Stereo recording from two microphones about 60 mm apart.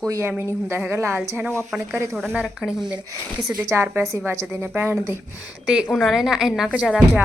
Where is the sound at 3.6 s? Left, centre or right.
Right.